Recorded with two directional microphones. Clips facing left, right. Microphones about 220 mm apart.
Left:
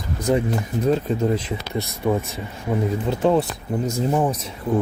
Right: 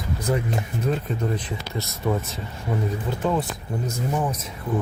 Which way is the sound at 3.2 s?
35° left (ahead or behind).